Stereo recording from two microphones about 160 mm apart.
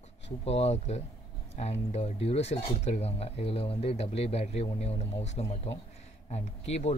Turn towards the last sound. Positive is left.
turn(degrees=40)  # may be behind; listen again after turning